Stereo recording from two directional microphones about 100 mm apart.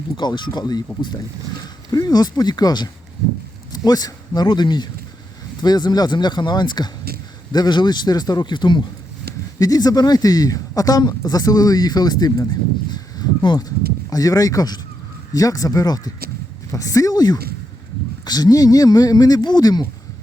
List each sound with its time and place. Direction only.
0.2 s speech: 50° left (ahead or behind)
1.9 s a man's voice: 40° left (ahead or behind)
9.6 s a man's voice: 40° left (ahead or behind)